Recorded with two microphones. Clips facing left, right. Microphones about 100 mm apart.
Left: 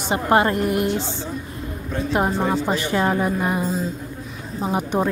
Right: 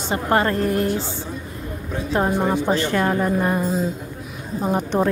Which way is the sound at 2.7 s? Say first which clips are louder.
Right 1 dB; 15° left (ahead or behind).